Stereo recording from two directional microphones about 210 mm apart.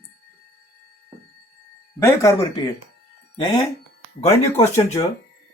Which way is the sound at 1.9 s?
15° left (ahead or behind).